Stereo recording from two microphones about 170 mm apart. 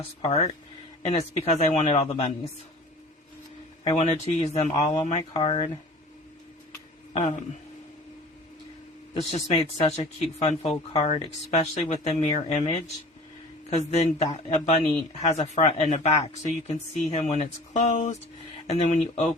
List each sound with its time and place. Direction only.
0.2 s speech: 35° left (ahead or behind)
1.5 s speech: 40° left (ahead or behind)
3.9 s speech: 40° left (ahead or behind)
4.7 s speech: 30° left (ahead or behind)
7.2 s speech: 45° left (ahead or behind)
9.1 s speech: 35° left (ahead or behind)